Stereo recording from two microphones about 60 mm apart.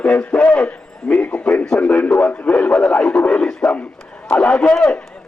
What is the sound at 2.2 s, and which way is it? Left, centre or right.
Radio, left.